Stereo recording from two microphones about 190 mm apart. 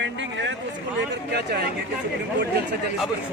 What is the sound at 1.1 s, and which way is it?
Speech, 60° right (ahead or behind).